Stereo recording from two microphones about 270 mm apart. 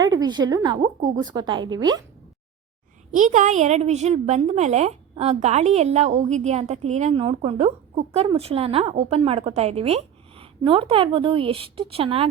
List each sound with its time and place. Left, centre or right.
0.0 s a woman's voice: centre
3.1 s a woman's voice: right